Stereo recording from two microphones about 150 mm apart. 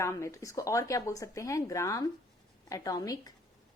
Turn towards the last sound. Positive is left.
turn(degrees=25)  # may be behind; listen again after turning